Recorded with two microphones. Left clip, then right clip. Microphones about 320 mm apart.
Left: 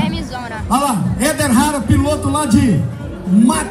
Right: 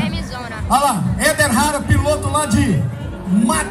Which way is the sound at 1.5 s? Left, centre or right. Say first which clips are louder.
Left 2 dB; centre.